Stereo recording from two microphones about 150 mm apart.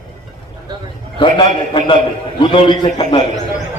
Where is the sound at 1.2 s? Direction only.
35° left (ahead or behind).